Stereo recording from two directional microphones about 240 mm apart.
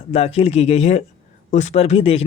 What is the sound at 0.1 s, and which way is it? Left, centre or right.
Speech, left.